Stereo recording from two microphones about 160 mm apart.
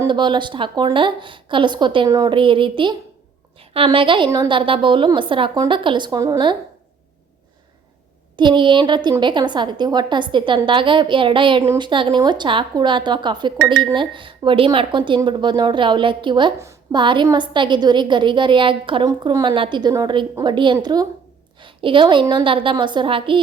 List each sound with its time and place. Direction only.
0.0 s a woman's voice: 30° right (ahead or behind)
8.4 s speech: 30° right (ahead or behind)
16.6 s a woman's voice: 20° right (ahead or behind)
17.0 s a woman's voice: 30° right (ahead or behind)